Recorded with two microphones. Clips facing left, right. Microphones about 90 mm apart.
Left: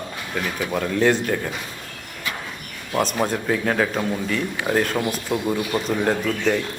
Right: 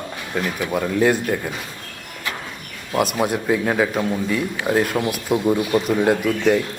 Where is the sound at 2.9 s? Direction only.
5° right (ahead or behind).